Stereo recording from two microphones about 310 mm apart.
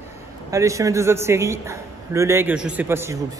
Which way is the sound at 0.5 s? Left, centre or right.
Centre.